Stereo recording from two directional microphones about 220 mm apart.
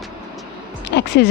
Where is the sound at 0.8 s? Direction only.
50° left (ahead or behind).